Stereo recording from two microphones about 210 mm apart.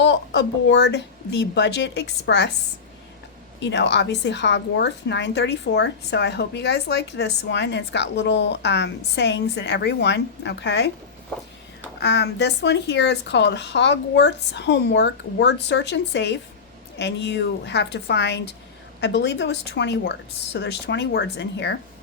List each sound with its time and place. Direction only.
0.0 s a woman's voice: 55° left (ahead or behind)
3.6 s a woman's voice: 55° left (ahead or behind)
11.9 s a woman's voice: 55° left (ahead or behind)